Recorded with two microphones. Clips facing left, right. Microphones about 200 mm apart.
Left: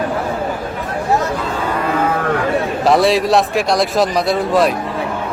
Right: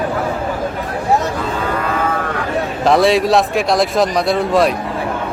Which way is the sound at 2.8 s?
Centre (ahead or behind).